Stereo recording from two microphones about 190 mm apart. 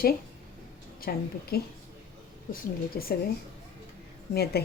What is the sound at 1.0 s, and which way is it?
Speech, 55° left (ahead or behind).